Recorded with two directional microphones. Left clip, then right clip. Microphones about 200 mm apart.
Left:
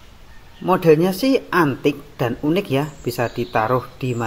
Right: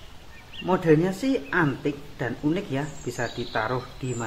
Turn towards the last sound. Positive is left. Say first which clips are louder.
# left 8 dB
turn(degrees=20)  # may be behind; listen again after turning